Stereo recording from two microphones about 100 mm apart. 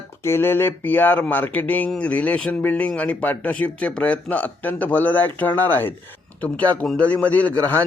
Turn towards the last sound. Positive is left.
turn(degrees=15)  # may be behind; listen again after turning